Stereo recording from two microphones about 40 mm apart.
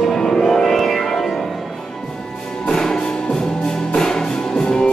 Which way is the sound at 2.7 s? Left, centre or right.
Centre.